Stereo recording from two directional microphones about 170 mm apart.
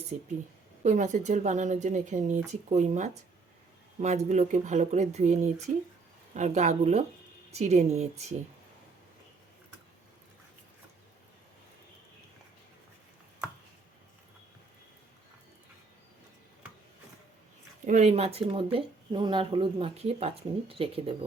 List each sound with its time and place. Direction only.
0.1 s speech: 45° right (ahead or behind)
4.3 s speech: 45° right (ahead or behind)
17.8 s speech: 40° right (ahead or behind)